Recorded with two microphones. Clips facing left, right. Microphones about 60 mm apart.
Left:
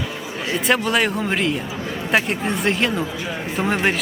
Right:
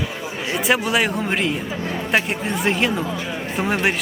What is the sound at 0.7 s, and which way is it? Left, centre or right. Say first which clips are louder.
Speech: even; centre.